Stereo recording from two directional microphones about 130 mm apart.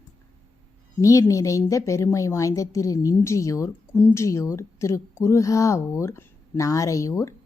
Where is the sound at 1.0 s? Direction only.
25° left (ahead or behind).